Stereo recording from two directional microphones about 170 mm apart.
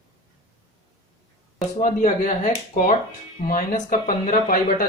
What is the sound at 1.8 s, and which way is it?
Speech, 45° left (ahead or behind).